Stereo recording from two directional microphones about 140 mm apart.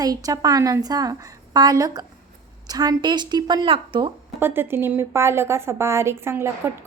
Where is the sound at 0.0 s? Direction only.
25° right (ahead or behind).